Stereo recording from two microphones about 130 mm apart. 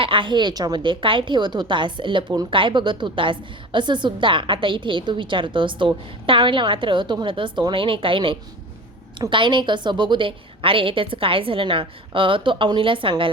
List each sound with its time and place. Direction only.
0.0 s a woman's voice: 40° right (ahead or behind)